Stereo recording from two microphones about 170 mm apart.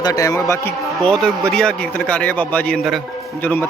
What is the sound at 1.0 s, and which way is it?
A man's voice, centre (ahead or behind).